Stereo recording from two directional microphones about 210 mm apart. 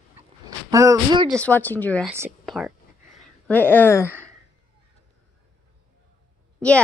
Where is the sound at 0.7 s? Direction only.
15° right (ahead or behind).